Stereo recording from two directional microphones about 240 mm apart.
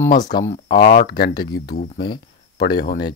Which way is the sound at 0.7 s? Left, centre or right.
Left.